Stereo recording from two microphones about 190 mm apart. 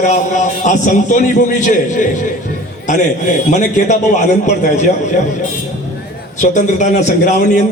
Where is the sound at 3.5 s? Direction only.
40° left (ahead or behind).